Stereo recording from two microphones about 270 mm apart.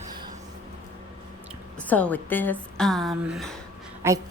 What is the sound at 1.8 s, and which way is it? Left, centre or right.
A woman's voice, centre.